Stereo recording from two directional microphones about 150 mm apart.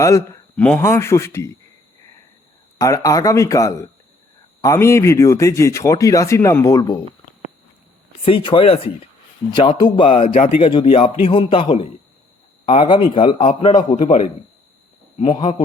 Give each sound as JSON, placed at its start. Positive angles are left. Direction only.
{"t": 0.0, "sound": "speech", "side_deg": 20}
{"t": 0.5, "sound": "speech", "side_deg": 5}
{"t": 0.8, "sound": "speech", "side_deg": 20}
{"t": 2.7, "sound": "speech", "side_deg": 20}
{"t": 8.2, "sound": "a man's voice", "side_deg": 35}
{"t": 9.5, "sound": "a man's voice", "side_deg": 30}
{"t": 10.2, "sound": "a man's voice", "side_deg": 60}
{"t": 10.6, "sound": "a man's voice", "side_deg": 35}
{"t": 13.4, "sound": "a man's voice", "side_deg": 55}
{"t": 15.2, "sound": "a man's voice", "side_deg": 35}